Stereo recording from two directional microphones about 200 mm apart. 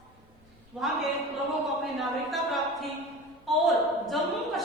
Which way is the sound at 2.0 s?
Centre (ahead or behind).